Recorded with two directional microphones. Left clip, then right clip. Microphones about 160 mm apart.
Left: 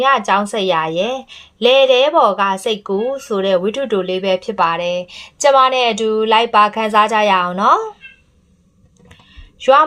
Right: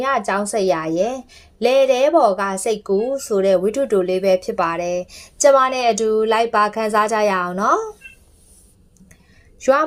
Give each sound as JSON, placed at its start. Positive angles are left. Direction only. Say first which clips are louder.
{"t": 0.3, "sound": "a woman's voice", "louder": "left 3 dB", "side_deg": -25}
{"t": 2.8, "sound": "speech", "louder": "even", "side_deg": -45}
{"t": 3.2, "sound": "a woman's voice", "louder": "even", "side_deg": -25}